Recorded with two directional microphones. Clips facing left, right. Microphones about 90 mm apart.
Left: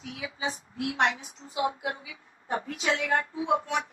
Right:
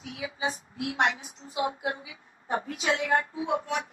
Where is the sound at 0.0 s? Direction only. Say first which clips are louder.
Right 2 dB; 35° right (ahead or behind).